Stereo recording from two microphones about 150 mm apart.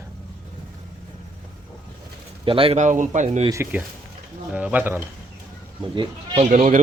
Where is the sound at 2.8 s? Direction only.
55° right (ahead or behind).